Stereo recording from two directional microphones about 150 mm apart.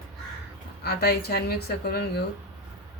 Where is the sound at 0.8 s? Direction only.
90° left.